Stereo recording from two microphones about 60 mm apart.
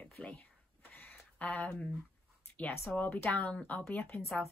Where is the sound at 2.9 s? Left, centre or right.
Left.